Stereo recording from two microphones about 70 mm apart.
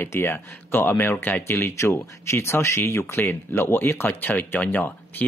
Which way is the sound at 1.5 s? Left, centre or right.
Left.